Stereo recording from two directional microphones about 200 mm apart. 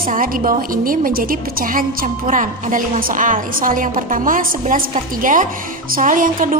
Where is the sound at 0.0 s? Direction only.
45° right (ahead or behind).